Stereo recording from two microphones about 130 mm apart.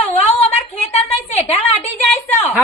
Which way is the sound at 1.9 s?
15° left (ahead or behind).